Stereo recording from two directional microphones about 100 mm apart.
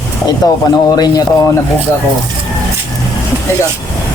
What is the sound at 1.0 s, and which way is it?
Speech, 40° left (ahead or behind).